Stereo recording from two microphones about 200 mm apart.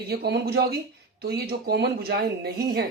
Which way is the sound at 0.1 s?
55° right (ahead or behind).